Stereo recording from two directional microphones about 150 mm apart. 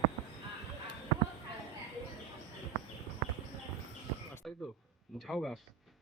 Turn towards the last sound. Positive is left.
turn(degrees=0)  # may be behind; listen again after turning